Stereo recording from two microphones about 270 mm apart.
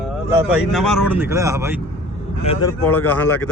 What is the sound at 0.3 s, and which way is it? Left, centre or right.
Speech, centre.